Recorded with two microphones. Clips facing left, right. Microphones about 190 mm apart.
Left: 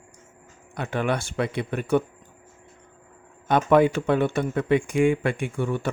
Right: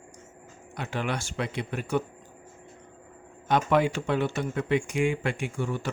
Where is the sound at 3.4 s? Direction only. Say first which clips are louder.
Left 5 dB; 55° left (ahead or behind).